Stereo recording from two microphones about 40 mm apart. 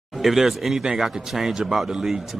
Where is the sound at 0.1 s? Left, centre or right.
Centre.